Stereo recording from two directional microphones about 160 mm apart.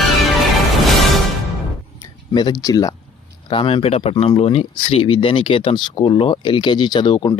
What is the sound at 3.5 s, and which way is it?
Speech, 35° left (ahead or behind).